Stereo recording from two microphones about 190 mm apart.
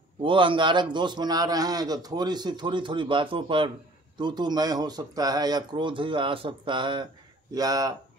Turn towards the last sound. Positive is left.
turn(degrees=-20)  # may be behind; listen again after turning